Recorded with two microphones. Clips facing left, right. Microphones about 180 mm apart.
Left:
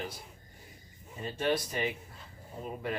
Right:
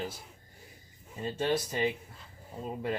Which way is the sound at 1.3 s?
25° right (ahead or behind).